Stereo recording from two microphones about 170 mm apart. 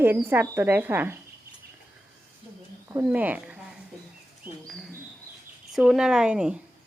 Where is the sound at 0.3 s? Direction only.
15° right (ahead or behind).